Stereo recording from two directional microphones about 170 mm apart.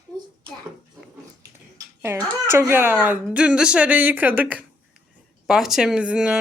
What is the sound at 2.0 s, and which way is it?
Speech, 15° right (ahead or behind).